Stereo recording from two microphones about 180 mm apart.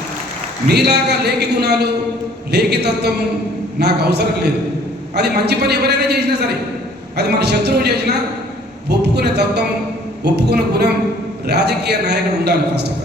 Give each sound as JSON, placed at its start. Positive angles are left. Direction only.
{"t": 0.7, "sound": "a man's voice", "side_deg": -65}